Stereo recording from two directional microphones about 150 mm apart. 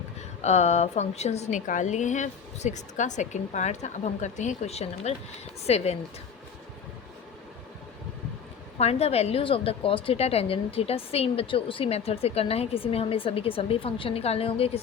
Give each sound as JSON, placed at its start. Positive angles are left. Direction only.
{"t": 0.4, "sound": "a woman's voice", "side_deg": 50}
{"t": 8.8, "sound": "a woman's voice", "side_deg": 45}